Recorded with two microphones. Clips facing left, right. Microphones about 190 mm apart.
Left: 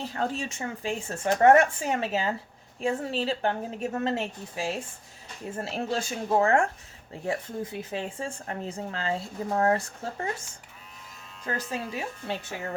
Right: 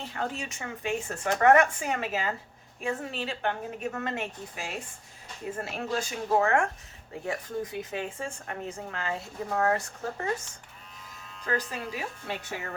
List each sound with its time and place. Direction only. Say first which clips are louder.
0.1 s speech: left 3 dB; 35° left (ahead or behind)
11.5 s speech: right 1 dB; 25° left (ahead or behind)